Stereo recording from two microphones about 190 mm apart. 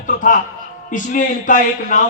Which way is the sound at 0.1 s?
45° left (ahead or behind).